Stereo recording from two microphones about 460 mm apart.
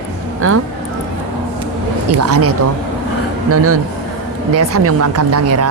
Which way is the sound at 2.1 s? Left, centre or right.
Right.